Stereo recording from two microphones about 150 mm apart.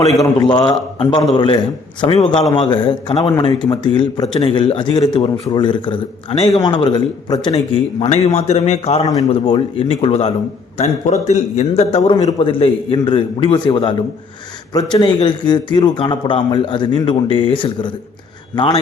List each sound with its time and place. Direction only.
0.2 s a man's voice: 25° left (ahead or behind)
2.0 s a man's voice: 40° left (ahead or behind)
7.5 s a man's voice: 45° left (ahead or behind)